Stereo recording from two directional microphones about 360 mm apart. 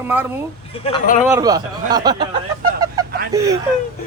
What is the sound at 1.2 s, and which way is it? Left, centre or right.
Speech, centre.